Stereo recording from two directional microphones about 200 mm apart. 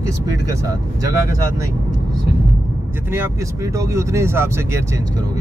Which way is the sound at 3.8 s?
15° right (ahead or behind).